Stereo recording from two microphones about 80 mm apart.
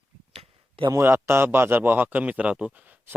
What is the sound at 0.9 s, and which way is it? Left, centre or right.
Speech, right.